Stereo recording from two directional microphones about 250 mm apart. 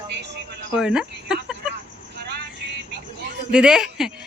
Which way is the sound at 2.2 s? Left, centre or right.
Right.